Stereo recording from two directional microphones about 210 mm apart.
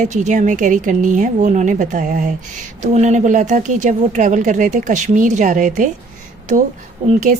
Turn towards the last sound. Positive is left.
turn(degrees=-35)  # may be behind; listen again after turning